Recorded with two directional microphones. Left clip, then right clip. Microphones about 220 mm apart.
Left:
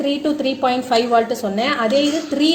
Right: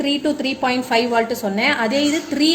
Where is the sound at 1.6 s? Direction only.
30° right (ahead or behind).